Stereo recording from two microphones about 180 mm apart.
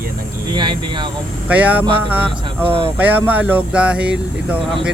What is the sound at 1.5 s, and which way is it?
Speech, 10° right (ahead or behind).